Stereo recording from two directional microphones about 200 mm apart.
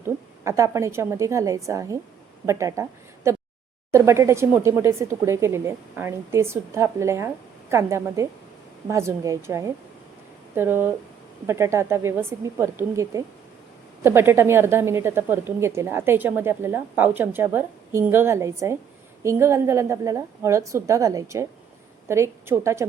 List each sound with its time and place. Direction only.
0.4 s a woman's voice: 15° right (ahead or behind)
3.3 s a sound: 15° right (ahead or behind)
3.9 s a woman's voice: 15° right (ahead or behind)